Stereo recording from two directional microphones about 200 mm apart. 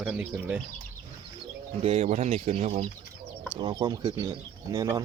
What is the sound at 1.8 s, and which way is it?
Speech, 35° right (ahead or behind).